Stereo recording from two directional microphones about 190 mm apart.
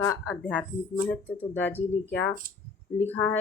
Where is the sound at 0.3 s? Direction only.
Centre (ahead or behind).